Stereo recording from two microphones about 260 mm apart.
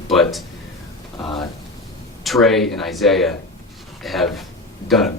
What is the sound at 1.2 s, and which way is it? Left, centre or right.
Speech, centre.